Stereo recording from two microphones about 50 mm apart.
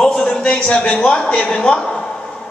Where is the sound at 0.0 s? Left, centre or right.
Centre.